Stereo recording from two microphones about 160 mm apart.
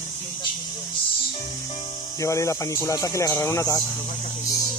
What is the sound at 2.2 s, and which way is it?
Speech, 20° left (ahead or behind).